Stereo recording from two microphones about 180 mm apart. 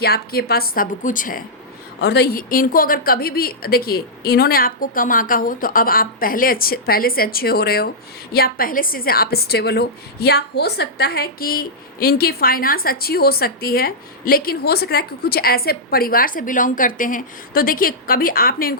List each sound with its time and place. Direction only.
0.0 s a woman's voice: 60° left (ahead or behind)
2.0 s a woman's voice: 65° left (ahead or behind)